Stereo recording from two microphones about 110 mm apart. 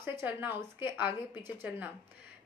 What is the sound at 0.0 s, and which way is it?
Speech, 20° right (ahead or behind).